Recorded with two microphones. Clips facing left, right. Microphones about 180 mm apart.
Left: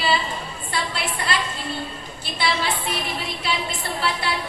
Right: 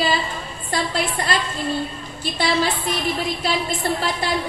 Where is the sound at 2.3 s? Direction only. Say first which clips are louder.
Right 4 dB; 40° right (ahead or behind).